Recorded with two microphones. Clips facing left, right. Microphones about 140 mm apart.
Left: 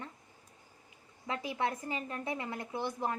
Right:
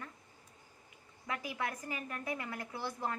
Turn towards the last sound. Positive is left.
turn(degrees=20)  # may be behind; listen again after turning